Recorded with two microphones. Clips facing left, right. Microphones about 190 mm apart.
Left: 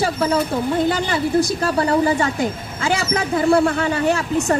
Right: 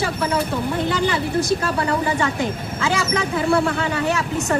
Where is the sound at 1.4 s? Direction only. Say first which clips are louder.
Left 2 dB; 35° left (ahead or behind).